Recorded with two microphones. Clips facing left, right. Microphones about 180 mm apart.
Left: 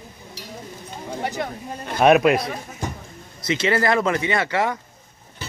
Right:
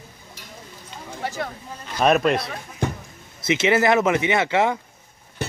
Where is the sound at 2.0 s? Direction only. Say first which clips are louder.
Left 3 dB; 5° left (ahead or behind).